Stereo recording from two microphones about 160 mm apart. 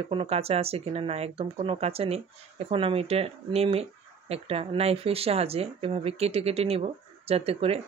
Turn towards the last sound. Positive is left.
turn(degrees=-40)  # may be behind; listen again after turning